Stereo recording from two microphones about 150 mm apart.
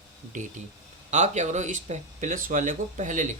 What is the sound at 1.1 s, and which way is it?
Speech, 50° right (ahead or behind).